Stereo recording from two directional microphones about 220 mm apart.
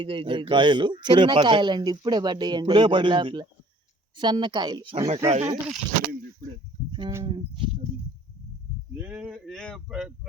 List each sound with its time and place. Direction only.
0.0 s a man's voice: 25° right (ahead or behind)
6.9 s a man's voice: 15° right (ahead or behind)
9.0 s speech: 5° right (ahead or behind)